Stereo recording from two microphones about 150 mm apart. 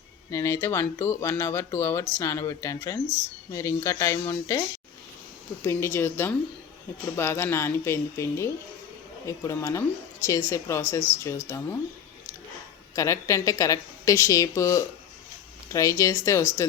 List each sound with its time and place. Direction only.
0.3 s a woman's voice: 20° left (ahead or behind)
5.6 s a woman's voice: 15° left (ahead or behind)
13.0 s a woman's voice: 20° left (ahead or behind)